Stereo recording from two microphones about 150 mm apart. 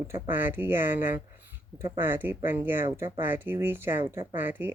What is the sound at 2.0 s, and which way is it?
Speech, 15° right (ahead or behind).